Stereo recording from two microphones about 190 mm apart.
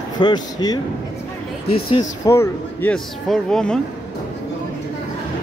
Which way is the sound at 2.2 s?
10° left (ahead or behind).